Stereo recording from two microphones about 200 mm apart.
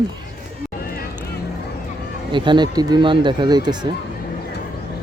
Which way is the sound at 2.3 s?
25° right (ahead or behind).